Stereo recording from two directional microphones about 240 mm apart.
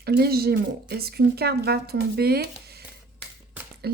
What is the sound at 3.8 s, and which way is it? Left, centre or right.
Speech, right.